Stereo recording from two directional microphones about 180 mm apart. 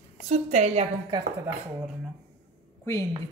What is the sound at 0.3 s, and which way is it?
Speech, 40° right (ahead or behind).